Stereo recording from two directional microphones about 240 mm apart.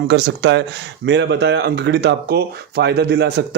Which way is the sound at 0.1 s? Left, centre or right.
Right.